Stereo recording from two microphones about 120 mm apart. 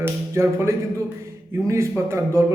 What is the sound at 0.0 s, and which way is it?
A man's voice, 20° right (ahead or behind).